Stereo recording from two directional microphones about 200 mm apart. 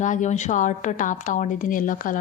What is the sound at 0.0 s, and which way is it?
A woman's voice, 40° left (ahead or behind).